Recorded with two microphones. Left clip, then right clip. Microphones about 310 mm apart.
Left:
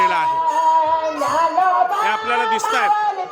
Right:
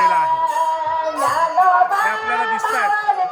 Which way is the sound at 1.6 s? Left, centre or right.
Left.